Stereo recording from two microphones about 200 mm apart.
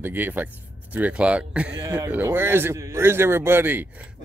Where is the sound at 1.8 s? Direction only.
15° right (ahead or behind).